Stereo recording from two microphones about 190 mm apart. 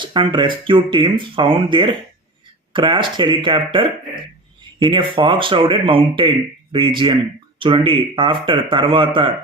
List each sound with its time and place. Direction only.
0.0 s speech: 25° right (ahead or behind)